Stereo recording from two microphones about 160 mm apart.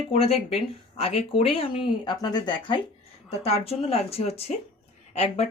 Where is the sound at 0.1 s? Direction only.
40° left (ahead or behind).